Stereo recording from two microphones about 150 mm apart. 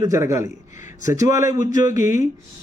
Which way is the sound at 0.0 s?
20° right (ahead or behind).